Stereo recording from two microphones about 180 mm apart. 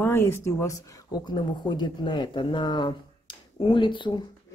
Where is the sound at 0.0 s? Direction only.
15° left (ahead or behind).